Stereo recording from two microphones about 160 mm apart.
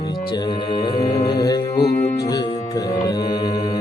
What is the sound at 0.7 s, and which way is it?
Music, 25° left (ahead or behind).